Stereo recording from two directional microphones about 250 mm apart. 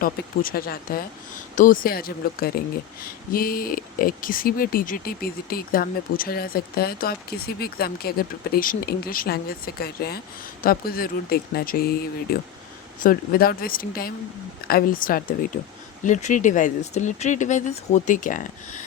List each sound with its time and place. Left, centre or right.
0.0 s speech: left